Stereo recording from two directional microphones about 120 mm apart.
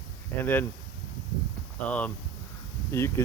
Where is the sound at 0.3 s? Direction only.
15° left (ahead or behind).